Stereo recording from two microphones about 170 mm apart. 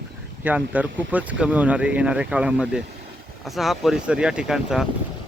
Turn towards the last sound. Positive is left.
turn(degrees=-5)  # may be behind; listen again after turning